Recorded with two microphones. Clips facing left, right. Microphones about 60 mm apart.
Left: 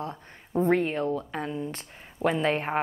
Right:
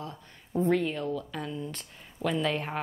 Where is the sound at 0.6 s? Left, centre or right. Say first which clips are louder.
Left 3 dB; left.